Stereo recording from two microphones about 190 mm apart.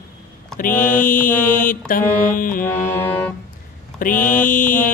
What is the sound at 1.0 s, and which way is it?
Mantra, 45° left (ahead or behind).